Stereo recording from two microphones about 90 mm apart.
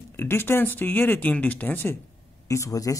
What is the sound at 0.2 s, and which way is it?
Speech, 25° left (ahead or behind).